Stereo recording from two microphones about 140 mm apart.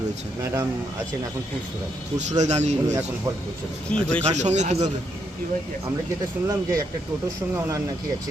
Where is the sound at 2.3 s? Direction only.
55° right (ahead or behind).